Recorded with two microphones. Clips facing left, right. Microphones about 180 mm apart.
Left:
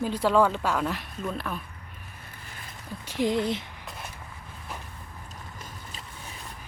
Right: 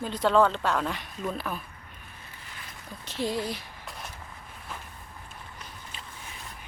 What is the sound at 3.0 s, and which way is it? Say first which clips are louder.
Speech: left 4 dB; 15° left (ahead or behind).